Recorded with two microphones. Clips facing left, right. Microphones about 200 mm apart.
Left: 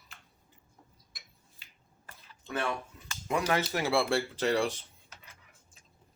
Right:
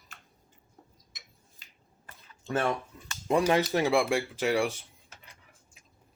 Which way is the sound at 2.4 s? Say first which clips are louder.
Right 5 dB; 50° right (ahead or behind).